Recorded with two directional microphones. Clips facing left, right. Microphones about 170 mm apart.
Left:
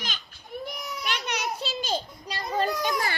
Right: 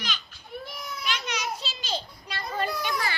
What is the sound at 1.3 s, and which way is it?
Children playing, 60° left (ahead or behind).